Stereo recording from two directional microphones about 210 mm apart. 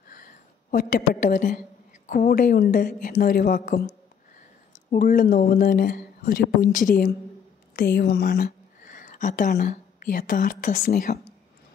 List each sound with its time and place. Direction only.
0.1 s a sound: 40° left (ahead or behind)
2.0 s a woman's voice: 45° left (ahead or behind)
4.9 s speech: 40° left (ahead or behind)